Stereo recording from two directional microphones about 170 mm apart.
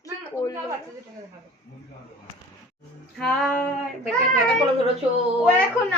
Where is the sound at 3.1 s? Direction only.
5° left (ahead or behind).